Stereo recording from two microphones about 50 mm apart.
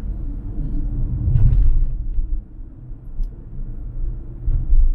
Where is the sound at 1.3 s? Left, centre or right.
Left.